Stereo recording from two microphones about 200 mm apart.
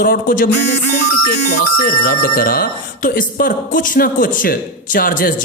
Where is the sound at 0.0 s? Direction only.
45° left (ahead or behind).